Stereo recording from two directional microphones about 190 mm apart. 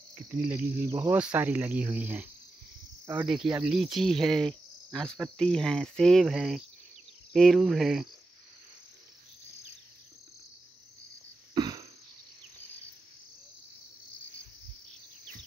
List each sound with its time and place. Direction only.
0.1 s cricket: 10° right (ahead or behind)
1.1 s speech: 10° right (ahead or behind)
3.3 s cricket: 5° right (ahead or behind)
11.5 s cough: 20° right (ahead or behind)